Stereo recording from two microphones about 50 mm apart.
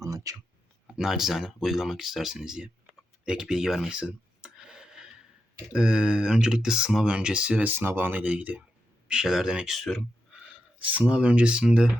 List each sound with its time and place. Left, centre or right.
0.9 s speech: centre
3.8 s a sound: centre
5.7 s speech: centre
7.8 s speech: right
9.0 s speech: centre
9.7 s speech: centre
10.9 s speech: right